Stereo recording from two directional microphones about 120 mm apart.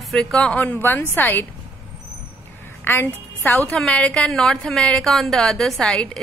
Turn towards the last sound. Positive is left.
turn(degrees=10)  # may be behind; listen again after turning